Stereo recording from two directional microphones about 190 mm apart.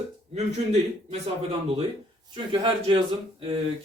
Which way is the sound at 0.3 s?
35° right (ahead or behind).